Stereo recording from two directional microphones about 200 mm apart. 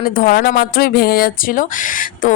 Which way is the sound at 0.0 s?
45° left (ahead or behind).